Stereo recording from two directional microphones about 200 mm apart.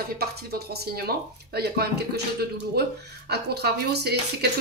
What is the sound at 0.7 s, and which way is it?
Speech, 50° right (ahead or behind).